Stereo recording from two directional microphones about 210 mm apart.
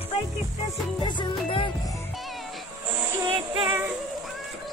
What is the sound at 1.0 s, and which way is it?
Music, 20° left (ahead or behind).